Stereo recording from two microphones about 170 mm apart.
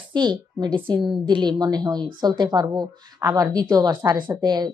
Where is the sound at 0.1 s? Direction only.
25° right (ahead or behind).